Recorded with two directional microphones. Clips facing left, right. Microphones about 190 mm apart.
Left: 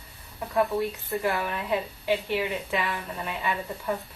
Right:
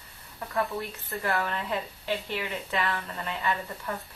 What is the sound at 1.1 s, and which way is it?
A woman's voice, 15° left (ahead or behind).